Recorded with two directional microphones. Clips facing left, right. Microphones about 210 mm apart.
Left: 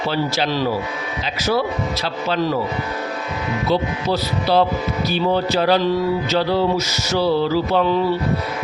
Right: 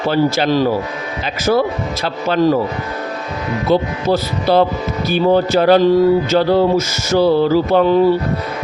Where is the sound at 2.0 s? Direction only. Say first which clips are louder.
Right 8 dB; 50° right (ahead or behind).